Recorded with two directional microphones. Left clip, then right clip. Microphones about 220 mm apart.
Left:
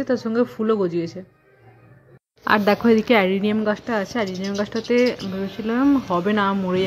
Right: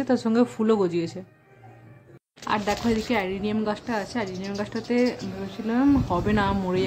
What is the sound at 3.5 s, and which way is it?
Speech, 15° left (ahead or behind).